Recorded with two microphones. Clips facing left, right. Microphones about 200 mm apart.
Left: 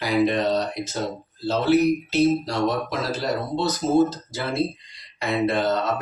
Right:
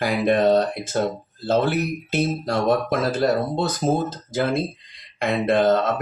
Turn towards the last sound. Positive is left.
turn(degrees=-50)  # may be behind; listen again after turning